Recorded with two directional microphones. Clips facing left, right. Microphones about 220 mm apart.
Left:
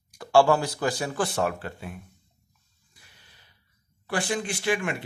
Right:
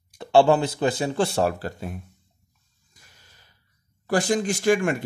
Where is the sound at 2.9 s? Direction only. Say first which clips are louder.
Right 1 dB; 45° right (ahead or behind).